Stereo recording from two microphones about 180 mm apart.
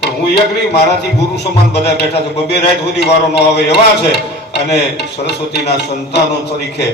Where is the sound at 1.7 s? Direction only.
65° left (ahead or behind).